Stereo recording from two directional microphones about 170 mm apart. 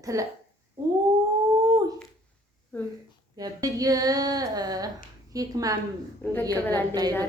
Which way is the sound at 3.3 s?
20° right (ahead or behind).